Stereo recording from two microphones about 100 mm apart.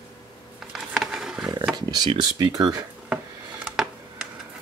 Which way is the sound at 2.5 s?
40° right (ahead or behind).